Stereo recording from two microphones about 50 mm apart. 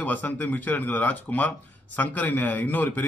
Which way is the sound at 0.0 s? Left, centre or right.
Left.